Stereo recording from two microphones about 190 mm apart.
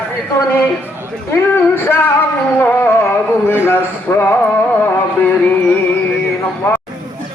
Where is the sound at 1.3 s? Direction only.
10° left (ahead or behind).